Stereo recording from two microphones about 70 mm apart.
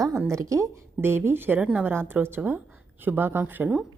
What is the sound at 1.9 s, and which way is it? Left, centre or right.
A woman's voice, right.